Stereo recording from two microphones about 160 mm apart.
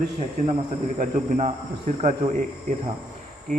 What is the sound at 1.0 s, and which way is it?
Speech, 45° right (ahead or behind).